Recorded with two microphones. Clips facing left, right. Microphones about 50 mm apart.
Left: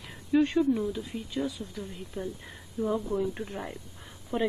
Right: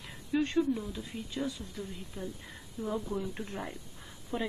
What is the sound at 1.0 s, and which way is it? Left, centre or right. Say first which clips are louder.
Speech: left 4 dB; centre.